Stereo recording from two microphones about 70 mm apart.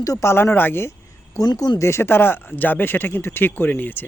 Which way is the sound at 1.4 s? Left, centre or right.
Left.